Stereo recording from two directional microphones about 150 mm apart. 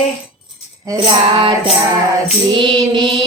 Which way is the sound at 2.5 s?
35° right (ahead or behind).